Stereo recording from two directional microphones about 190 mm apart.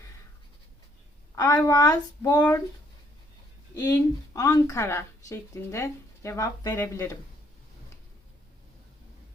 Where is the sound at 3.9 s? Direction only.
15° left (ahead or behind).